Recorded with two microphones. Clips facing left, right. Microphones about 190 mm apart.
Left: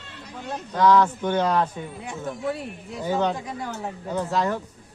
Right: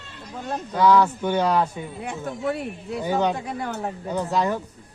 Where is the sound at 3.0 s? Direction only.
10° right (ahead or behind).